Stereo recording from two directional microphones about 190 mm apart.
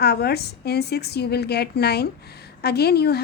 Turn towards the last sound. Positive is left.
turn(degrees=55)  # may be behind; listen again after turning